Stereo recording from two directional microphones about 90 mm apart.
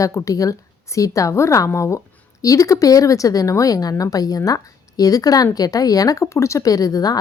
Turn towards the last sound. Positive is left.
turn(degrees=45)  # may be behind; listen again after turning